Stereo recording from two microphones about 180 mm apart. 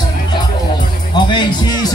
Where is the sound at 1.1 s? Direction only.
25° left (ahead or behind).